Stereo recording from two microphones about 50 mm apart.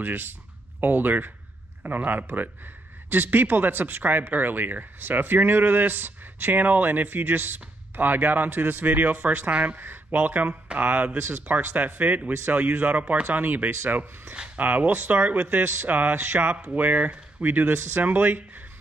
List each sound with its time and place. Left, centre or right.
0.0 s speech: right
9.8 s speech: right
11.1 s speech: right
11.4 s speech: right
15.6 s speech: right